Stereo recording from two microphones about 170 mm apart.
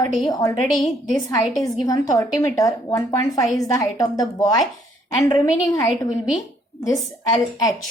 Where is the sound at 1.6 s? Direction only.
20° left (ahead or behind).